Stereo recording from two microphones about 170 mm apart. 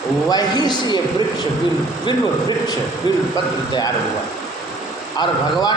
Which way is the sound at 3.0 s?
25° left (ahead or behind).